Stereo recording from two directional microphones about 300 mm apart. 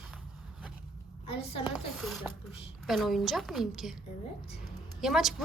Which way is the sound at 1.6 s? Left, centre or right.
Centre.